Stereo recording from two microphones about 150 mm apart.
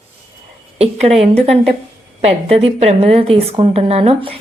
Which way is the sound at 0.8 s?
45° right (ahead or behind).